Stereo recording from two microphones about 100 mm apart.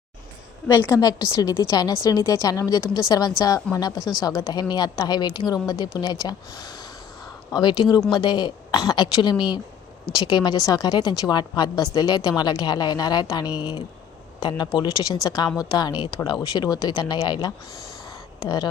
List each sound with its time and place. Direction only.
0.9 s a woman's voice: 35° left (ahead or behind)